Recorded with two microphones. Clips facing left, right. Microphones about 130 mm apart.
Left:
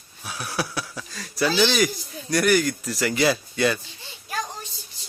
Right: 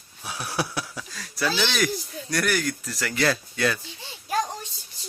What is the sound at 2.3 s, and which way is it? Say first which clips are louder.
Speech: left 5 dB; 5° left (ahead or behind).